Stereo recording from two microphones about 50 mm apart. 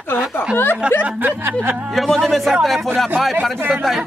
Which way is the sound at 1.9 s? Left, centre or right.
Centre.